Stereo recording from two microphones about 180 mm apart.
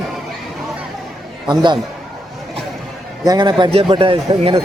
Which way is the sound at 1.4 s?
25° right (ahead or behind).